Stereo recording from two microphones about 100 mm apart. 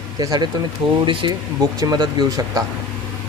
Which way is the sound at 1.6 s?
40° right (ahead or behind).